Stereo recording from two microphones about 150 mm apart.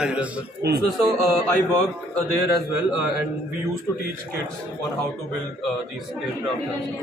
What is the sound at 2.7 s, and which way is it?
Speech, 5° right (ahead or behind).